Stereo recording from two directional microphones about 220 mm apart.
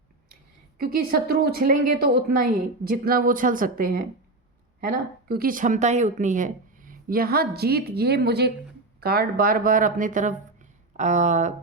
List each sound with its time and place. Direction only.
0.8 s speech: 45° right (ahead or behind)